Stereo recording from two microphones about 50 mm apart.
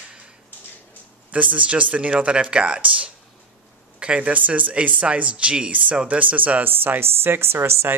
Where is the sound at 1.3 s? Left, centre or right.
Right.